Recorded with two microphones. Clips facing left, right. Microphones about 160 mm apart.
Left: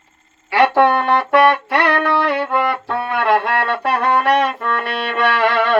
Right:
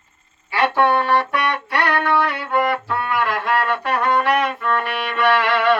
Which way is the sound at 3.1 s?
65° left (ahead or behind).